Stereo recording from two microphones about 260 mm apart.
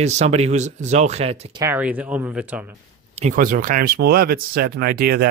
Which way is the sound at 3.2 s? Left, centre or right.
Right.